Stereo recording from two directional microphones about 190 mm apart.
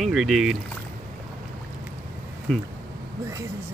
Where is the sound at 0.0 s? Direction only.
Centre (ahead or behind).